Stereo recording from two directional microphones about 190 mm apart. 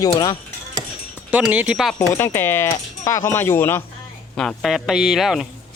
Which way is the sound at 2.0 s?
15° left (ahead or behind).